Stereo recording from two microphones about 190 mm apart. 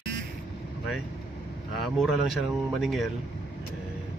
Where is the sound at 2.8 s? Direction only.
Centre (ahead or behind).